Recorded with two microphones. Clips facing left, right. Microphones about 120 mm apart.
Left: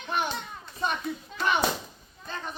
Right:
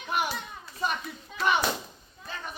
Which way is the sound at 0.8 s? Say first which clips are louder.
Left 2 dB; 5° right (ahead or behind).